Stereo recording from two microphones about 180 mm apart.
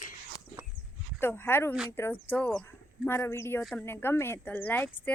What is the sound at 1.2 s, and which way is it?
Speech, 10° left (ahead or behind).